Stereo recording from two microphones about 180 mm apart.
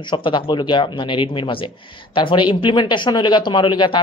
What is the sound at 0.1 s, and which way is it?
Speech, 25° left (ahead or behind).